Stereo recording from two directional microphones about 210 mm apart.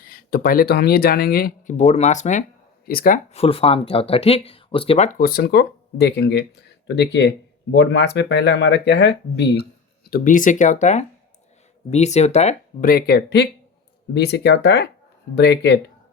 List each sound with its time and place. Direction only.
0.1 s speech: 45° left (ahead or behind)
3.3 s speech: 30° left (ahead or behind); by 9.6 s 55° left (ahead or behind)
10.1 s speech: 40° left (ahead or behind)